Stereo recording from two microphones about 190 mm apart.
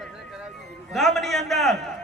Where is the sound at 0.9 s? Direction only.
Centre (ahead or behind).